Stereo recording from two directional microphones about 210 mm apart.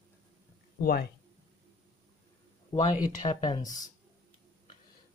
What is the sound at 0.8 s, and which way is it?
Speech, 45° left (ahead or behind).